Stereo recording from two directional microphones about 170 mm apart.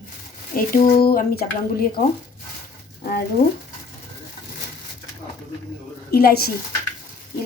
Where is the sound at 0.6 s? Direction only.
60° left (ahead or behind).